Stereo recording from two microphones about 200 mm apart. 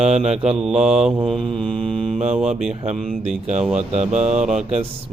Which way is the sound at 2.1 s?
35° right (ahead or behind).